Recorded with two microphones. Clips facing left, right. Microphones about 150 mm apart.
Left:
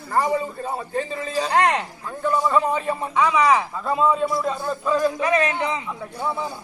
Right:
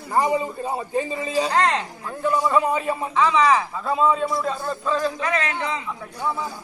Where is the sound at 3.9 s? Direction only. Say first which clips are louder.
Even; centre (ahead or behind); by 5.7 s 20° left (ahead or behind).